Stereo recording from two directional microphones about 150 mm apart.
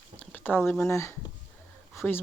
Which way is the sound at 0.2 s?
10° left (ahead or behind).